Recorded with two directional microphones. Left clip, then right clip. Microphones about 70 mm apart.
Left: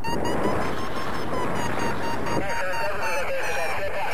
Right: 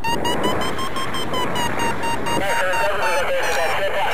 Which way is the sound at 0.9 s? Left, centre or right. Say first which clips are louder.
Right 5 dB; left.